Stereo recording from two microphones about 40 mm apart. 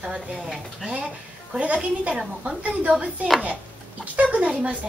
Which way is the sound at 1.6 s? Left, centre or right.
Right.